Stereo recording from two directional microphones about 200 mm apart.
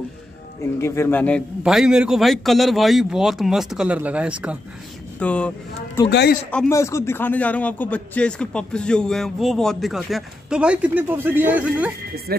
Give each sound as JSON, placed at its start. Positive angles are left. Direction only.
{"t": 0.7, "sound": "speech", "side_deg": 15}
{"t": 1.6, "sound": "a man's voice", "side_deg": -5}
{"t": 5.2, "sound": "speech", "side_deg": 5}
{"t": 6.0, "sound": "a man's voice", "side_deg": 55}
{"t": 6.7, "sound": "a man's voice", "side_deg": 15}
{"t": 12.3, "sound": "speech", "side_deg": -50}